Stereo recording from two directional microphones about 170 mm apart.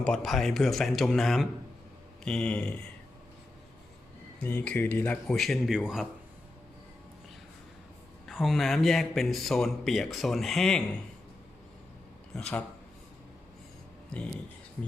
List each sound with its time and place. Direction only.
0.0 s speech: 5° left (ahead or behind)
4.4 s speech: 10° left (ahead or behind)
8.3 s speech: centre (ahead or behind)
14.1 s speech: 5° left (ahead or behind)